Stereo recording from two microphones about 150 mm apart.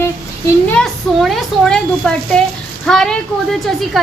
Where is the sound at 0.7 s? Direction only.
5° left (ahead or behind).